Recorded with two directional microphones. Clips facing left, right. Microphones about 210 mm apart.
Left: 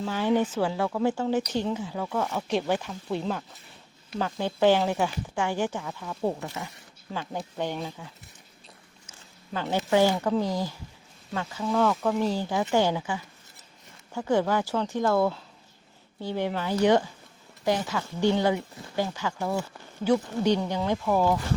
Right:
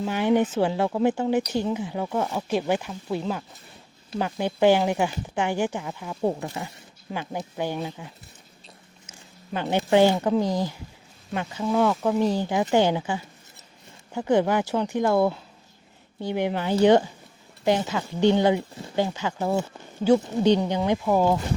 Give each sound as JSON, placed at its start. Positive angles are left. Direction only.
{"t": 0.0, "sound": "speech", "side_deg": -15}
{"t": 2.3, "sound": "speech", "side_deg": -10}